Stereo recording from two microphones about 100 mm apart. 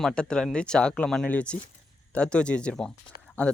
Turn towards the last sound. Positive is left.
turn(degrees=10)  # may be behind; listen again after turning